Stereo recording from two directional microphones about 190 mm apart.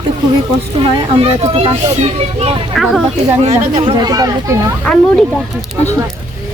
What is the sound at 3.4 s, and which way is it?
Speech, 35° right (ahead or behind).